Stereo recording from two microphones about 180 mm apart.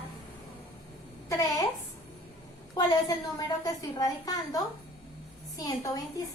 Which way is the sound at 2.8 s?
20° left (ahead or behind).